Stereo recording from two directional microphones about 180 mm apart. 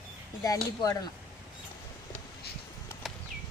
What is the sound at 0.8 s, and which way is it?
Speech, 20° left (ahead or behind).